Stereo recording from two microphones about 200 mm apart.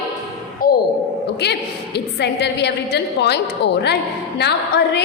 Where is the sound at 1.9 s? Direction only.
60° left (ahead or behind).